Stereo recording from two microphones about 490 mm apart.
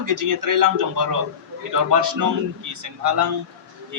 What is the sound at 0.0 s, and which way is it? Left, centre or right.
A man's voice, right.